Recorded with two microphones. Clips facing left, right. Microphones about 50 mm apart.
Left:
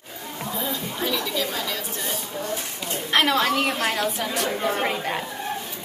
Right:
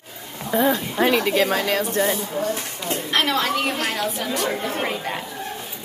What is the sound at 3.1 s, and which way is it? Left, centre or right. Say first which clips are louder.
A woman's voice: left 2 dB; centre.